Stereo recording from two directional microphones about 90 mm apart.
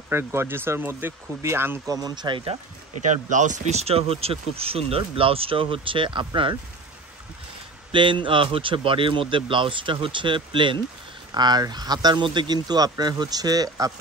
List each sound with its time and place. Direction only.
0.1 s speech: 30° right (ahead or behind)
1.9 s speech: 45° right (ahead or behind); by 2.5 s 65° right (ahead or behind)
3.9 s speech: 90° right; by 6.5 s 70° right (ahead or behind)
7.9 s speech: 65° right (ahead or behind)
11.3 s speech: 50° right (ahead or behind)